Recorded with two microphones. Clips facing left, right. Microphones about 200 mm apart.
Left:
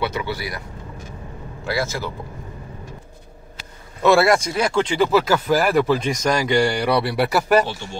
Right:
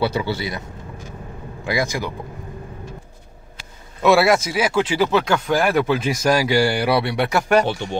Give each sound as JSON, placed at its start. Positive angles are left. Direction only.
{"t": 0.0, "sound": "a man's voice", "side_deg": -30}
{"t": 4.0, "sound": "speech", "side_deg": 0}